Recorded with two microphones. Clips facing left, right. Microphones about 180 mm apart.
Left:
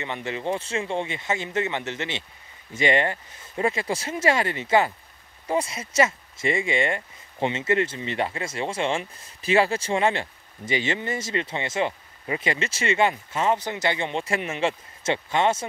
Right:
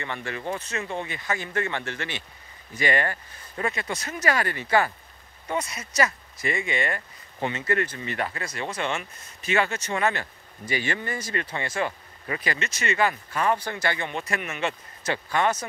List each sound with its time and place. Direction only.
0.0 s speech: 20° left (ahead or behind)